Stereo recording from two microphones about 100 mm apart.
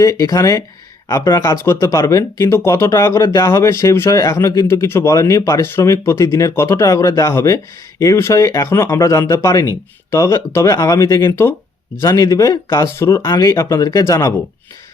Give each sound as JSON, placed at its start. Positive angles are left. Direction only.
{"t": 0.0, "sound": "speech", "side_deg": 35}